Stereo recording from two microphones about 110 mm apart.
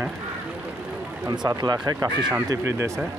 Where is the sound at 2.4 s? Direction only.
25° right (ahead or behind).